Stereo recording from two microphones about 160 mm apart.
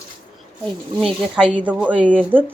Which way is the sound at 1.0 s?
Centre (ahead or behind).